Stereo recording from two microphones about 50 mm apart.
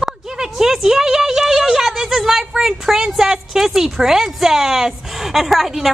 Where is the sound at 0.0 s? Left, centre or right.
Centre.